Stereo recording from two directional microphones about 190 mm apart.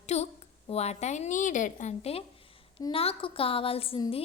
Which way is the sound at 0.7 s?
35° left (ahead or behind).